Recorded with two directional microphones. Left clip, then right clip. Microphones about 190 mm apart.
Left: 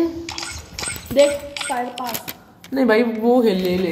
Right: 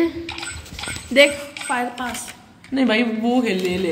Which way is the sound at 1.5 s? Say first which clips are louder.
Even; 65° left (ahead or behind).